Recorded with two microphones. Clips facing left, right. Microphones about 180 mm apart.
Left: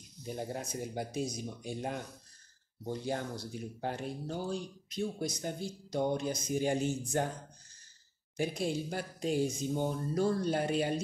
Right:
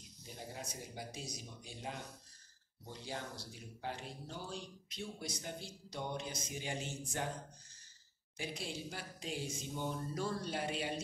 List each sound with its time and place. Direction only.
0.2 s speech: 55° left (ahead or behind)
8.4 s speech: 45° left (ahead or behind)